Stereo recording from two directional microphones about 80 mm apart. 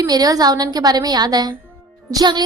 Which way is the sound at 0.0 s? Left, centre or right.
Right.